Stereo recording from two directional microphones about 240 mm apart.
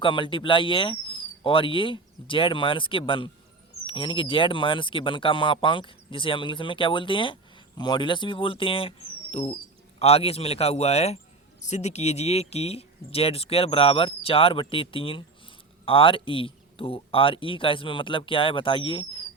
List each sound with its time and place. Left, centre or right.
0.0 s speech: left